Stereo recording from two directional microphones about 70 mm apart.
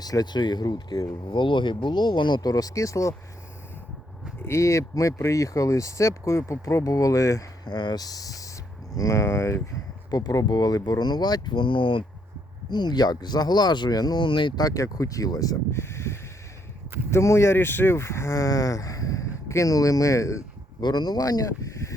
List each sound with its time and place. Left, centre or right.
0.0 s speech: left
4.4 s speech: left
7.6 s speech: left
9.0 s speech: left
10.1 s speech: left
12.7 s speech: left
15.7 s a sound: left
17.1 s speech: left
20.8 s speech: left